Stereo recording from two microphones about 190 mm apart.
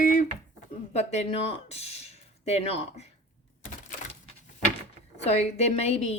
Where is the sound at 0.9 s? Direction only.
35° left (ahead or behind).